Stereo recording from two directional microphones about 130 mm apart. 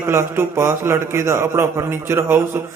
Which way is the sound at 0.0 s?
20° right (ahead or behind).